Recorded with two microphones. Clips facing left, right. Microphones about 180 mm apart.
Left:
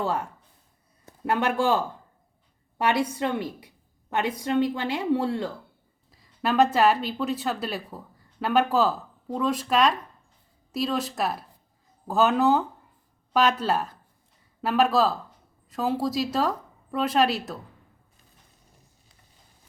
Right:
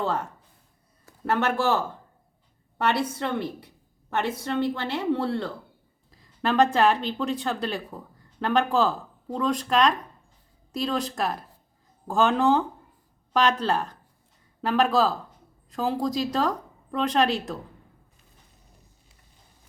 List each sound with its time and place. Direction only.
0.0 s a woman's voice: 10° left (ahead or behind)